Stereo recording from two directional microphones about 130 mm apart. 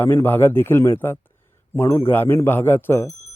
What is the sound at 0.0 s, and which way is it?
Speech, 15° left (ahead or behind).